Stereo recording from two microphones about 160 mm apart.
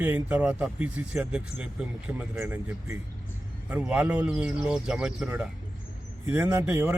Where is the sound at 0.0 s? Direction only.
10° right (ahead or behind).